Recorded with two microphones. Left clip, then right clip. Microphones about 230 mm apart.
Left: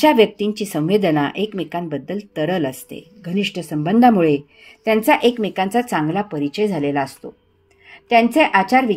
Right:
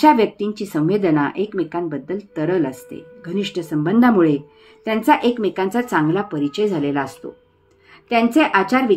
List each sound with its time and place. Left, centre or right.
0.0 s speech: left